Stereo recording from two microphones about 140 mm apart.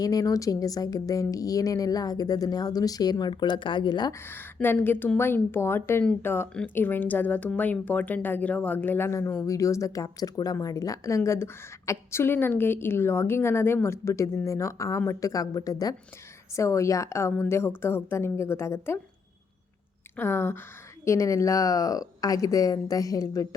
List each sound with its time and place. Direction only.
0.0 s speech: 25° left (ahead or behind)
4.3 s a woman's voice: 15° left (ahead or behind)
20.1 s a woman's voice: 15° left (ahead or behind)